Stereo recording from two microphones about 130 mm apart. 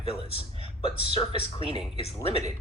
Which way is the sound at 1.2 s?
45° left (ahead or behind).